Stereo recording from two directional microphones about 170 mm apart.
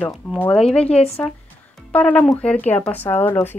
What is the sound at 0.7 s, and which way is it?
Speech, 35° left (ahead or behind).